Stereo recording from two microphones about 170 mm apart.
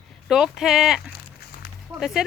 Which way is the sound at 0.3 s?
5° right (ahead or behind).